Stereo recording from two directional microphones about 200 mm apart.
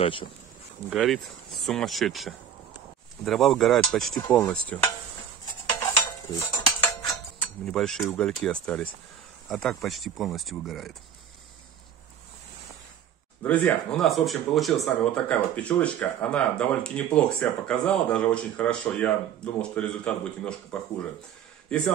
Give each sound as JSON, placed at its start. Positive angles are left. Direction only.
{"t": 0.0, "sound": "speech", "side_deg": 25}
{"t": 0.8, "sound": "speech", "side_deg": 0}
{"t": 4.3, "sound": "dishes", "side_deg": 5}
{"t": 5.9, "sound": "stir", "side_deg": 15}
{"t": 7.3, "sound": "speech", "side_deg": 5}
{"t": 13.4, "sound": "speech", "side_deg": 5}
{"t": 21.7, "sound": "speech", "side_deg": 5}